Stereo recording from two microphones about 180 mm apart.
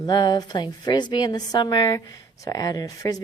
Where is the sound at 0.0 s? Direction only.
20° left (ahead or behind).